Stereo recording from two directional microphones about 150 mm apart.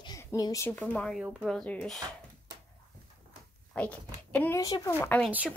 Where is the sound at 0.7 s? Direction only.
5° left (ahead or behind).